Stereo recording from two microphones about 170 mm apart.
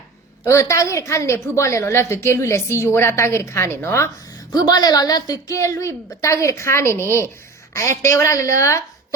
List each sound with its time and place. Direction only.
0.4 s a woman's voice: 15° left (ahead or behind)